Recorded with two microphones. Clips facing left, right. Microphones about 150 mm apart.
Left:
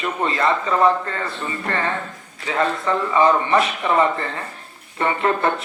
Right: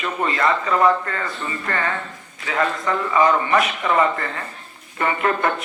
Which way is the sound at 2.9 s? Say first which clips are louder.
Left 1 dB; 30° left (ahead or behind).